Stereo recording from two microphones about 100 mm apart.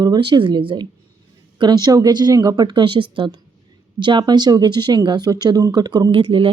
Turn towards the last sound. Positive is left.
turn(degrees=-65)  # may be behind; listen again after turning